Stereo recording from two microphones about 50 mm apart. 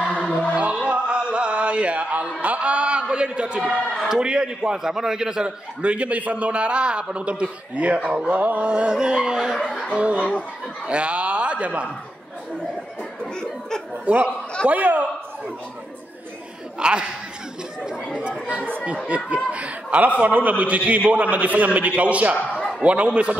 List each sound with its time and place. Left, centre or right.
0.1 s music: left
0.6 s music: right
4.1 s a man's voice: centre
5.8 s a man's voice: right
8.9 s a man's voice: centre
9.6 s speech: centre
9.9 s a man's voice: right
13.2 s a sound: centre
14.1 s a man's voice: right
16.8 s a man's voice: centre
19.0 s a man's voice: right